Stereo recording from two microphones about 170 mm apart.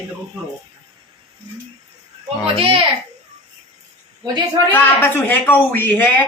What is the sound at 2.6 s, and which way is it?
Speech, 35° right (ahead or behind).